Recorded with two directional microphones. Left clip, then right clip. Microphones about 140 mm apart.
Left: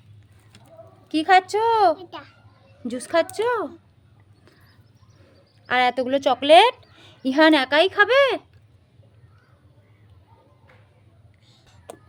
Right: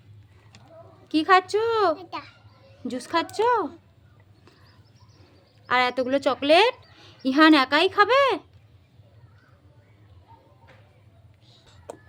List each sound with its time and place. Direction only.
1.0 s a woman's voice: 10° left (ahead or behind)
2.0 s a child's voice: 70° right (ahead or behind)
2.8 s a woman's voice: 10° left (ahead or behind)
5.6 s a woman's voice: 5° left (ahead or behind)
11.4 s a sound: 15° right (ahead or behind)